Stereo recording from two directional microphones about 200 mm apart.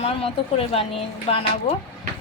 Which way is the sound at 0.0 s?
30° left (ahead or behind).